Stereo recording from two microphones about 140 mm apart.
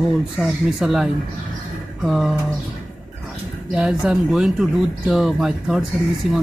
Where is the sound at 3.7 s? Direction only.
5° right (ahead or behind).